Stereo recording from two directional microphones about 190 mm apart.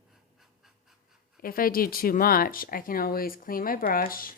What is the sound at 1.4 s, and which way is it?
Speech, 50° left (ahead or behind).